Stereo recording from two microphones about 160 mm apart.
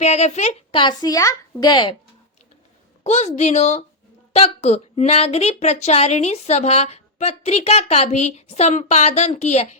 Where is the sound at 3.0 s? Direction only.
45° left (ahead or behind).